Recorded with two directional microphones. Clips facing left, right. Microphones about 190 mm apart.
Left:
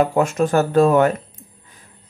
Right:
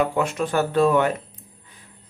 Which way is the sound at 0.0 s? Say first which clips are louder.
Left 5 dB; 45° left (ahead or behind).